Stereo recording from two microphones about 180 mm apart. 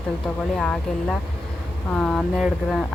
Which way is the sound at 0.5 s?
5° left (ahead or behind).